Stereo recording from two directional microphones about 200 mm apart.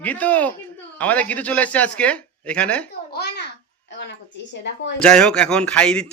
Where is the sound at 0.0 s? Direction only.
10° left (ahead or behind).